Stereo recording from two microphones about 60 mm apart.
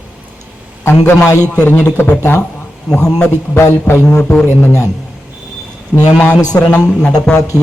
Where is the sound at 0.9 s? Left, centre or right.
Left.